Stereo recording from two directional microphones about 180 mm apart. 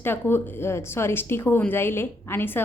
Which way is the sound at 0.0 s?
10° left (ahead or behind).